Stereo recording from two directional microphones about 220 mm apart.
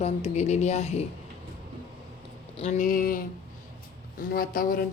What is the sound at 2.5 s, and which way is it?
Speech, 30° left (ahead or behind).